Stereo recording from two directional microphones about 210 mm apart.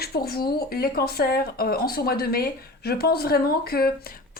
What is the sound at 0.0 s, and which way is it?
A woman's voice, 45° left (ahead or behind).